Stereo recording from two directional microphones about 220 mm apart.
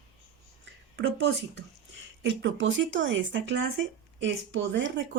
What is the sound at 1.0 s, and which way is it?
Speech, 55° right (ahead or behind).